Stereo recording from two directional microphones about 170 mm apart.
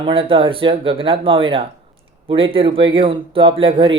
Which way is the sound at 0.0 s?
30° right (ahead or behind).